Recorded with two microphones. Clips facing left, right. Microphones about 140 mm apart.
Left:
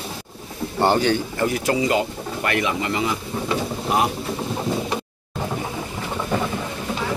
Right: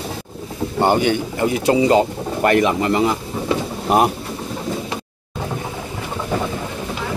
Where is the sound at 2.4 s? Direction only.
40° right (ahead or behind).